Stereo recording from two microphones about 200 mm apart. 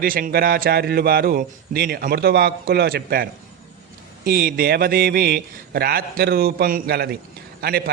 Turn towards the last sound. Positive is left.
turn(degrees=-50)  # may be behind; listen again after turning